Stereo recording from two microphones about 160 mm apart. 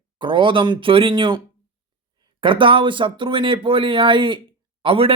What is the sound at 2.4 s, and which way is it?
Speech, 30° right (ahead or behind).